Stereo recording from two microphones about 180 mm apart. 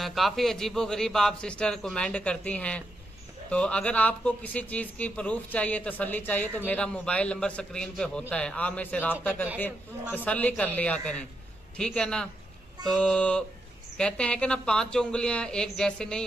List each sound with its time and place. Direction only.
0.0 s speech: centre (ahead or behind)